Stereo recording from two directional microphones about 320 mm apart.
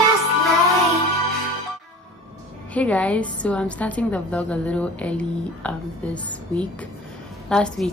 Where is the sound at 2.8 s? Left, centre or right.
Centre.